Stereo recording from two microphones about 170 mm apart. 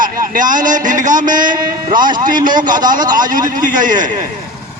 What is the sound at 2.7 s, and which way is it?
Speech, 25° right (ahead or behind).